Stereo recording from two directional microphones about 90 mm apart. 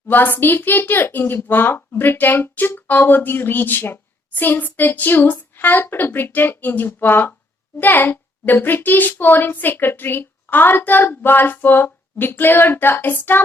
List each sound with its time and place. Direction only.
0.1 s speech: 20° left (ahead or behind)